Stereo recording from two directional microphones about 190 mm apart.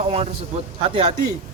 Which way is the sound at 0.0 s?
30° right (ahead or behind).